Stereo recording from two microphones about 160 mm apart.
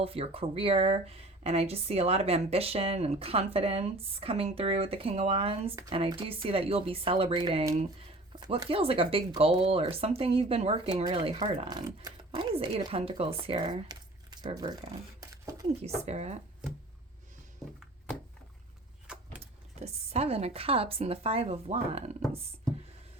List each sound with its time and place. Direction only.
0.0 s speech: 35° right (ahead or behind)
15.2 s a sound: 20° right (ahead or behind)
16.0 s speech: 45° right (ahead or behind)
19.0 s vehicle: 5° right (ahead or behind)
19.4 s speech: 40° right (ahead or behind)